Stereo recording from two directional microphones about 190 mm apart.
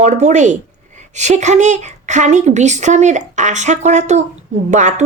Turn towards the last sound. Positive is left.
turn(degrees=-40)  # may be behind; listen again after turning